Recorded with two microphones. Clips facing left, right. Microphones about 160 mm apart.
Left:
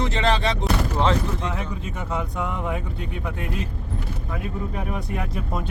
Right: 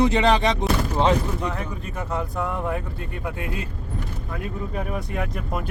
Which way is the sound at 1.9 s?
Centre (ahead or behind).